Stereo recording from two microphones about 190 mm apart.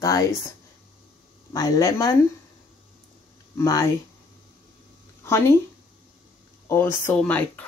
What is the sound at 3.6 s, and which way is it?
Speech, 15° left (ahead or behind).